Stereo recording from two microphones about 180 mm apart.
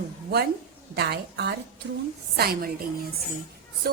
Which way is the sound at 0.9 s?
65° right (ahead or behind).